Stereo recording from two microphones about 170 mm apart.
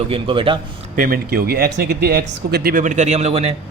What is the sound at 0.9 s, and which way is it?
A man's voice, 55° right (ahead or behind).